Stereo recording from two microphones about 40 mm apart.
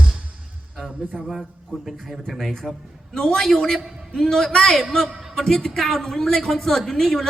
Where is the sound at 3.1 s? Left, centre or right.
Centre.